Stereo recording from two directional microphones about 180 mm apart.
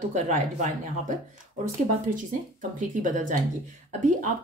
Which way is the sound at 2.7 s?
45° right (ahead or behind).